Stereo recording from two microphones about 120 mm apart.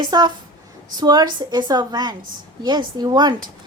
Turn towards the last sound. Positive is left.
turn(degrees=-35)  # may be behind; listen again after turning